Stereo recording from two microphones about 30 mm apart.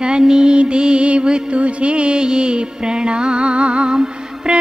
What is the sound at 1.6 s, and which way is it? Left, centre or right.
Music, right.